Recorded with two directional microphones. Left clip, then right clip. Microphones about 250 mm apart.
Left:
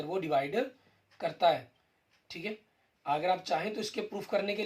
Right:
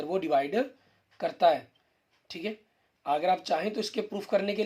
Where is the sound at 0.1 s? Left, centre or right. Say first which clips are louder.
Right 4 dB; right.